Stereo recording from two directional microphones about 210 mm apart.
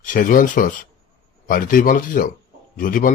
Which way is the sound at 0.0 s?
40° left (ahead or behind).